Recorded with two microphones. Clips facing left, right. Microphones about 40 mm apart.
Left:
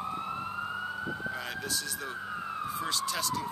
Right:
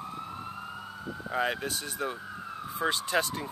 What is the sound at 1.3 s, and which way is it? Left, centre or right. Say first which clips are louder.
Speech: right 5 dB; right.